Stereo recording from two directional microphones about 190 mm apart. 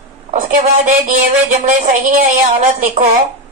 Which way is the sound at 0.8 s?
40° right (ahead or behind).